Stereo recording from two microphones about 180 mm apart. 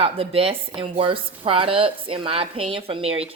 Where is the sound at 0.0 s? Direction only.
30° right (ahead or behind).